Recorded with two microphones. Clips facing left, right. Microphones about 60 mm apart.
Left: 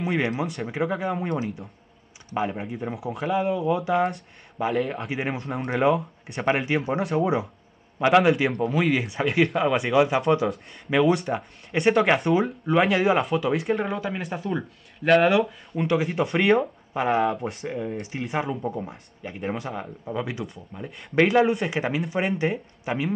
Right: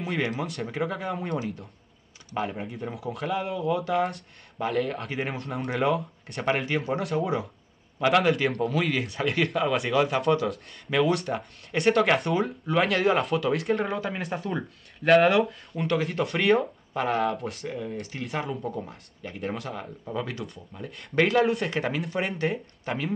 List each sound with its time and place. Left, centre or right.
0.4 s speech: centre
2.5 s speech: centre
16.9 s speech: centre